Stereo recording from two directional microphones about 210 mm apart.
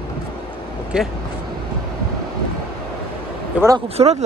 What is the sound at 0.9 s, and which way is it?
Speech, 5° right (ahead or behind).